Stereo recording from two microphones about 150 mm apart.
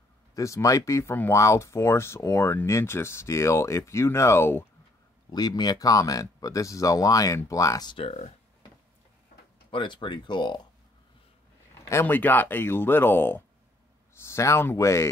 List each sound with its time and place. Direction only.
0.3 s speech: 20° left (ahead or behind)
5.3 s speech: 25° left (ahead or behind)
8.0 s speech: 45° left (ahead or behind)
9.7 s speech: 35° left (ahead or behind)
11.9 s speech: 15° left (ahead or behind)